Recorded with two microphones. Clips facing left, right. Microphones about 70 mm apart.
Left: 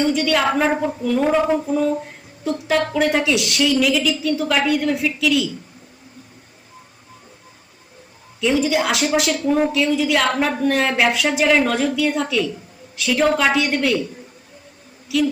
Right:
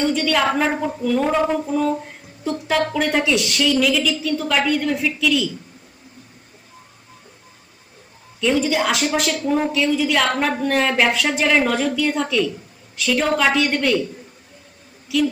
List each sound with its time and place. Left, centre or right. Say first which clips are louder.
0.0 s a woman's voice: left 1 dB; centre
8.4 s a woman's voice: left 1 dB; centre
15.1 s a woman's voice: even; centre